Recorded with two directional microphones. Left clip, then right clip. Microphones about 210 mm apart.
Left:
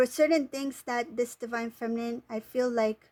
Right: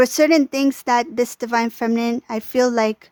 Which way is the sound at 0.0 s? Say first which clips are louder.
Right 10 dB; 35° right (ahead or behind).